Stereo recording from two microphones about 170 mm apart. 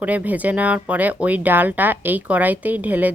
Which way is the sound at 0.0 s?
10° right (ahead or behind).